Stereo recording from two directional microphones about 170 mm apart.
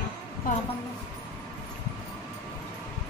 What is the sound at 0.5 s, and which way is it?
Speech, 55° left (ahead or behind).